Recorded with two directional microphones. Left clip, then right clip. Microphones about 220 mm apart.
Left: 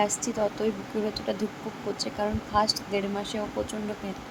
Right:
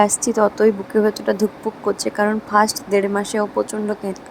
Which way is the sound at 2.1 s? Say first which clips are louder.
Right 9 dB; 30° right (ahead or behind).